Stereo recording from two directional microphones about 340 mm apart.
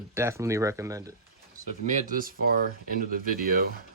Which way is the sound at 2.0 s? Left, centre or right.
Right.